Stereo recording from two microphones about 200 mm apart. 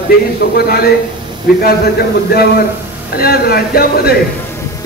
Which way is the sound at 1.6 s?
50° left (ahead or behind).